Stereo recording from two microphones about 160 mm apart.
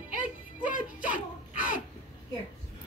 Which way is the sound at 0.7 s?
55° left (ahead or behind).